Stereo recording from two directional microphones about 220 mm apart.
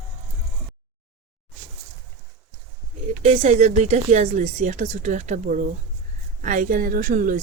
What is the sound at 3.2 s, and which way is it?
Speech, 30° right (ahead or behind).